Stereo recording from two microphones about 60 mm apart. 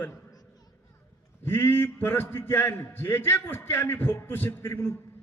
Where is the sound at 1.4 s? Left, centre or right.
Left.